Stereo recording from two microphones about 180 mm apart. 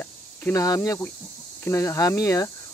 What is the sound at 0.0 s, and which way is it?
Speech, 10° left (ahead or behind).